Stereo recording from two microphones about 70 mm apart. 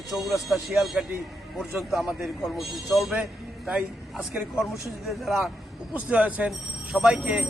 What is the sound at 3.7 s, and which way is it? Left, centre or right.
Speech, centre.